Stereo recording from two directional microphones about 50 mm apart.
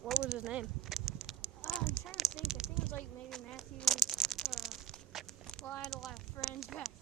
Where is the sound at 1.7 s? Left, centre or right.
Left.